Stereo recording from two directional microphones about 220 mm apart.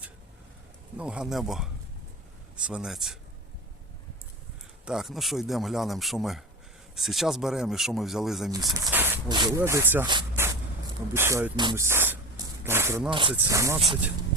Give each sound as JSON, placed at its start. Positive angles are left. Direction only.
{"t": 0.9, "sound": "speech", "side_deg": -5}
{"t": 4.9, "sound": "speech", "side_deg": 0}
{"t": 8.5, "sound": "speech", "side_deg": -15}
{"t": 9.3, "sound": "speech", "side_deg": -20}
{"t": 10.1, "sound": "a sound", "side_deg": -15}
{"t": 11.1, "sound": "speech", "side_deg": -10}
{"t": 13.1, "sound": "speech", "side_deg": -20}